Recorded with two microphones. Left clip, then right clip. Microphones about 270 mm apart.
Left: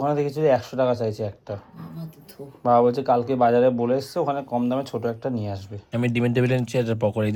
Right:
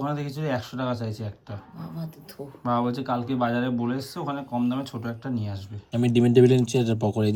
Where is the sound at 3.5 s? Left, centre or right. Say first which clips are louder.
Left 9 dB; centre.